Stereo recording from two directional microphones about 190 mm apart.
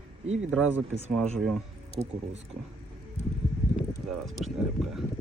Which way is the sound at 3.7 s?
Centre (ahead or behind).